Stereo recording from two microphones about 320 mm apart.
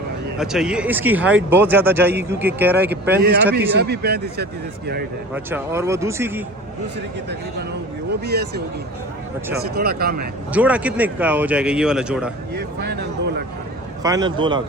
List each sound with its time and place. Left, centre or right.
0.3 s speech: centre
3.8 s speech: right
5.3 s speech: centre
8.2 s speech: right
10.5 s speech: centre
12.5 s speech: right
14.0 s speech: centre